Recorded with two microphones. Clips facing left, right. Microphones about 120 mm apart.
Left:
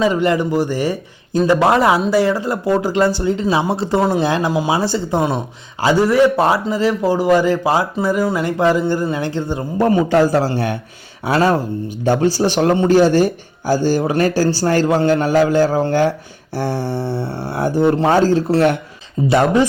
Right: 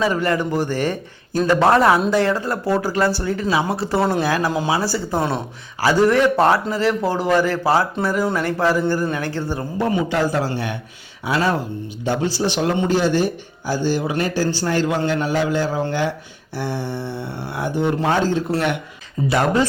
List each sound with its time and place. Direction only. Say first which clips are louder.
0.0 s a man's voice: left 4 dB; 20° left (ahead or behind)
9.7 s speech: left 7 dB; 45° left (ahead or behind)
19.3 s speech: left 4 dB; 25° left (ahead or behind)